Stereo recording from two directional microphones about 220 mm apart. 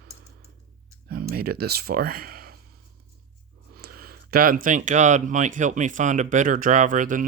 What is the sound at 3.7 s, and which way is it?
Speech, 45° right (ahead or behind).